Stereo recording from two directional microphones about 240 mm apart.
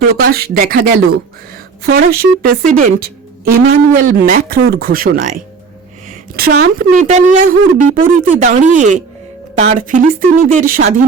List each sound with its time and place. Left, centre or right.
0.1 s a woman's voice: right